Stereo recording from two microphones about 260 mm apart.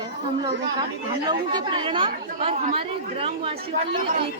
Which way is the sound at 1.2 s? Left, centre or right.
Centre.